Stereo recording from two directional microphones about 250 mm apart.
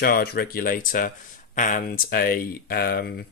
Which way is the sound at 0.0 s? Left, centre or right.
Left.